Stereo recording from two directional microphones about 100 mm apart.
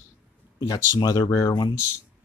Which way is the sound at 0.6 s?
45° left (ahead or behind).